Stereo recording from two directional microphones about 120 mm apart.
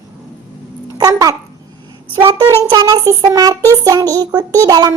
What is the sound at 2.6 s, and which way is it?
Child singing, 30° right (ahead or behind).